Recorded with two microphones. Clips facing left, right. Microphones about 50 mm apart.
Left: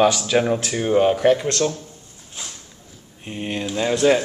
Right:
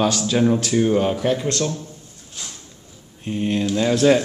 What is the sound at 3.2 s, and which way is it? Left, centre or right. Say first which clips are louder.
Speech: right 5 dB; centre.